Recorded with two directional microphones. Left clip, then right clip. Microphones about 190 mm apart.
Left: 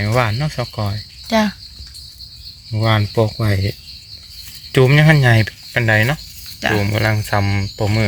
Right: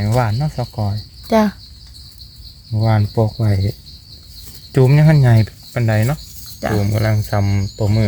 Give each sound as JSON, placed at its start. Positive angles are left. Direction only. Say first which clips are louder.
{"t": 0.0, "sound": "speech", "louder": "left 2 dB", "side_deg": 5}
{"t": 1.3, "sound": "speech", "louder": "right 2 dB", "side_deg": -60}
{"t": 2.7, "sound": "speech", "louder": "left 2 dB", "side_deg": 0}